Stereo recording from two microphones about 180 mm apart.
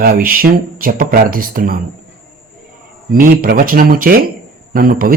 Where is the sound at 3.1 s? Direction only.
50° right (ahead or behind).